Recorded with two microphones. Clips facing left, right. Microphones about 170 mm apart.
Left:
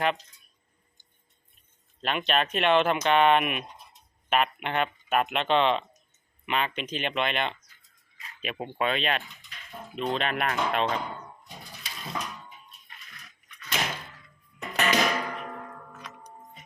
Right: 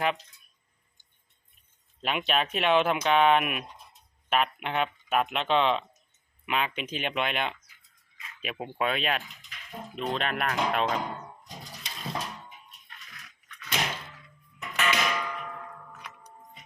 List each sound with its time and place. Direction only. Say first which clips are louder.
2.0 s speech: left 1 dB; 5° right (ahead or behind)
13.6 s door: even; centre (ahead or behind)
14.6 s a sound: left 3 dB; 40° left (ahead or behind)